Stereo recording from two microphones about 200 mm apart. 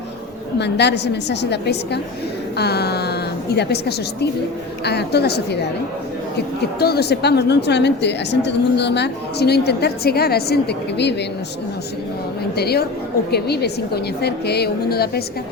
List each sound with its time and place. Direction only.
0.6 s a woman's voice: 55° left (ahead or behind)
6.7 s a woman's voice: 50° left (ahead or behind)
12.5 s a woman's voice: 50° left (ahead or behind)